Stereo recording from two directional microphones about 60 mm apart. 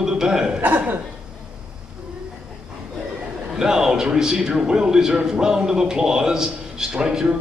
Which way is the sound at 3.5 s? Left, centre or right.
Centre.